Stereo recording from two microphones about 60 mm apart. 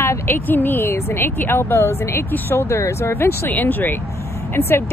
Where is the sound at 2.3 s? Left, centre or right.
Left.